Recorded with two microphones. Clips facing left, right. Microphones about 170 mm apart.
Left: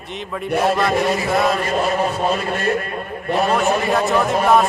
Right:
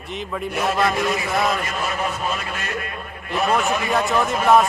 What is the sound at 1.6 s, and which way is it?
A man's voice, 35° left (ahead or behind).